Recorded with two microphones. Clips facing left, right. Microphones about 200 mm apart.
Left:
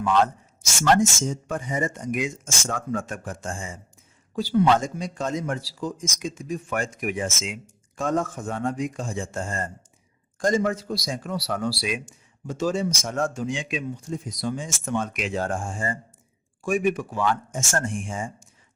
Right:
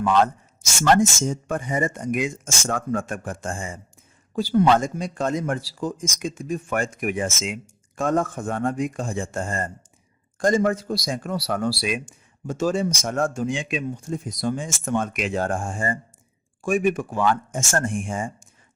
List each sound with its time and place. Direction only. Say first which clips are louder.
0.9 s a man's voice: right 2 dB; 55° right (ahead or behind)